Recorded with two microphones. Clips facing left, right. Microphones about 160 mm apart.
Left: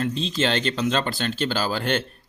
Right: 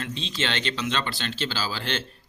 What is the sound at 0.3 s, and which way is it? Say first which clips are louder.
Speech: left 3 dB; 40° left (ahead or behind).